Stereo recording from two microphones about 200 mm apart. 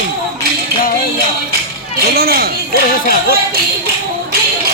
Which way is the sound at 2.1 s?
50° right (ahead or behind).